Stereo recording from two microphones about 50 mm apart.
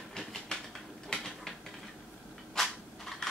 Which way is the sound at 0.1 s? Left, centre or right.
Centre.